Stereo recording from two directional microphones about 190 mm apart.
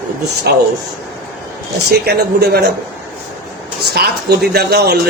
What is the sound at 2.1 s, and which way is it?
Speech, 55° right (ahead or behind).